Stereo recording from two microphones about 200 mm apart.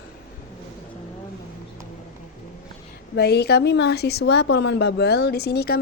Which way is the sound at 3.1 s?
55° left (ahead or behind).